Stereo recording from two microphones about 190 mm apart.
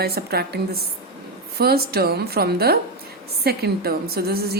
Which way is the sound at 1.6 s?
55° right (ahead or behind).